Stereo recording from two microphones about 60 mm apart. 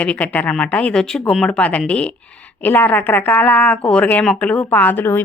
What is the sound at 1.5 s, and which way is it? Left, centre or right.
Speech, left.